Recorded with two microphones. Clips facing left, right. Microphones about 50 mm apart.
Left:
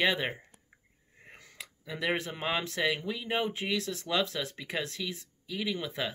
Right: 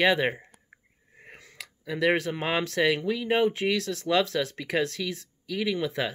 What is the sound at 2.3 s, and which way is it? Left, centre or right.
Speech, centre.